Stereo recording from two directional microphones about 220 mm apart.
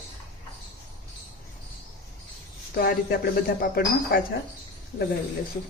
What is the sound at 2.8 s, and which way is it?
Speech, 45° left (ahead or behind).